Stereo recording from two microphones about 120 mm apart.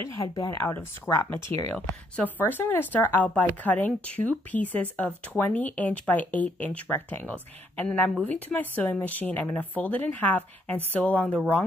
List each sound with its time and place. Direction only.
0.0 s speech: 25° left (ahead or behind)